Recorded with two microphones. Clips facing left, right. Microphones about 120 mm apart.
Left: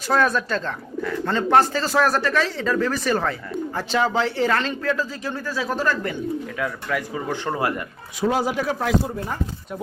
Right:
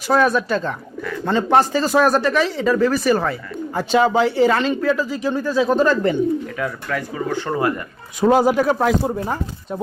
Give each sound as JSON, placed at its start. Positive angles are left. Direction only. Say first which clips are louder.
{"t": 0.1, "sound": "speech", "louder": "right 4 dB", "side_deg": -10}
{"t": 6.9, "sound": "speech", "louder": "right 4 dB", "side_deg": 15}
{"t": 8.2, "sound": "speech", "louder": "right 7 dB", "side_deg": -50}